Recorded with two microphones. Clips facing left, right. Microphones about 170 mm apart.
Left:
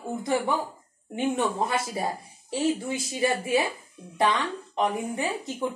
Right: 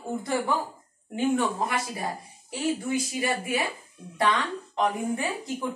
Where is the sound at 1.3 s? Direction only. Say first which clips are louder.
Left 1 dB; 25° left (ahead or behind).